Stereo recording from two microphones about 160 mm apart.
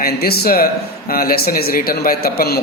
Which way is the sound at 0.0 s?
70° left (ahead or behind).